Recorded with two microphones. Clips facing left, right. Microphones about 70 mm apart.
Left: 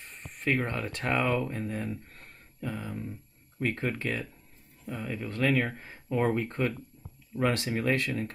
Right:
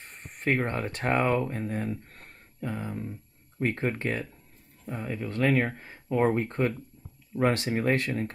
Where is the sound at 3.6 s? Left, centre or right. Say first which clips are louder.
Right 2 dB; right.